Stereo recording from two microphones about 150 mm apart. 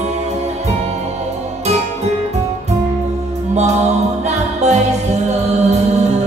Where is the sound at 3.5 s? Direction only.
45° right (ahead or behind).